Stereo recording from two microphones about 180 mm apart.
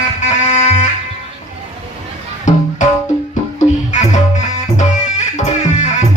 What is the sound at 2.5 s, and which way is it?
Music, 45° left (ahead or behind).